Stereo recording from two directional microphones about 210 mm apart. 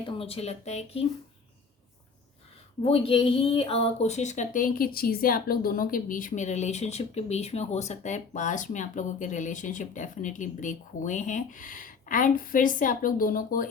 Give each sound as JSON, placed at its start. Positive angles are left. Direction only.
{"t": 0.0, "sound": "speech", "side_deg": 25}
{"t": 2.8, "sound": "speech", "side_deg": 25}